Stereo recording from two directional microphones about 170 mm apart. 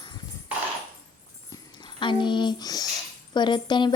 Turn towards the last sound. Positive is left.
turn(degrees=25)  # may be behind; listen again after turning